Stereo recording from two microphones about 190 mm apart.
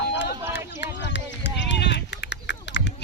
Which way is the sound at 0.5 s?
65° left (ahead or behind).